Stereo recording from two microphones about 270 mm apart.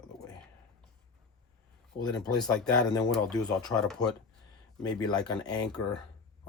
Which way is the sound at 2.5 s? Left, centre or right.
Centre.